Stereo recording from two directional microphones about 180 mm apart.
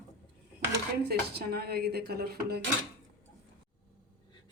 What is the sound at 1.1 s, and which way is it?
A woman's voice, 60° right (ahead or behind).